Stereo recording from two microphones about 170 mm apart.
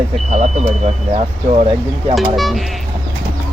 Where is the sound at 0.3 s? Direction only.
40° right (ahead or behind).